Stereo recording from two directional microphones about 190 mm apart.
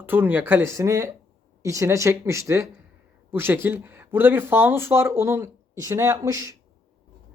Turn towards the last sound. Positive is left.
turn(degrees=-20)  # may be behind; listen again after turning